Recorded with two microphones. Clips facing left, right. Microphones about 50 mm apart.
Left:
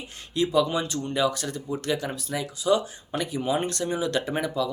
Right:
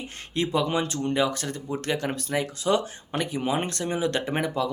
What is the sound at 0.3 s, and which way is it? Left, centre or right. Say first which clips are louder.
Speech: left 2 dB; right.